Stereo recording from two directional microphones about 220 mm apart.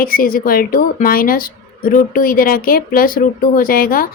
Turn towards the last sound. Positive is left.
turn(degrees=40)  # may be behind; listen again after turning